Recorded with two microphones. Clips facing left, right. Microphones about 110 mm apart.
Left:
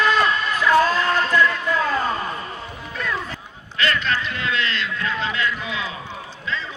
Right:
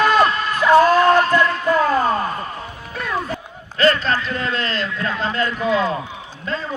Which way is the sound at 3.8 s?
35° right (ahead or behind).